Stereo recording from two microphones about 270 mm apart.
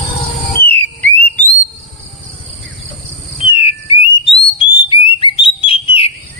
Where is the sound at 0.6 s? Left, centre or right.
Centre.